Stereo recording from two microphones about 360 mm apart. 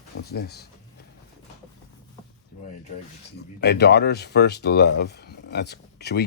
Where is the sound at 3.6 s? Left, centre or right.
Left.